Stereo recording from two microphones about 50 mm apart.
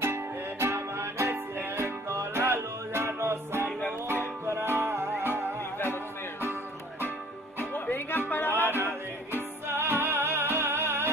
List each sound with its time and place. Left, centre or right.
0.0 s music: right
1.8 s music: right
2.4 s music: right
4.6 s music: right
7.7 s music: left
8.7 s music: right